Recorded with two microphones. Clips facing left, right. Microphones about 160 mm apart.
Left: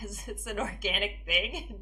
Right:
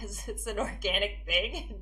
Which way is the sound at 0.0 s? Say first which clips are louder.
Right 2 dB; 40° right (ahead or behind).